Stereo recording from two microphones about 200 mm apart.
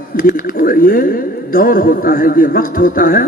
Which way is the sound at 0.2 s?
45° left (ahead or behind).